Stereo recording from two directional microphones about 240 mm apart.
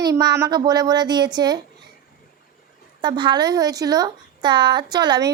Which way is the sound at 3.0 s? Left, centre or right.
Centre.